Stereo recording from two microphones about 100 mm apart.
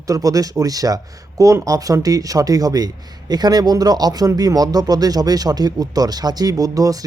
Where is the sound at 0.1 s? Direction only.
35° right (ahead or behind).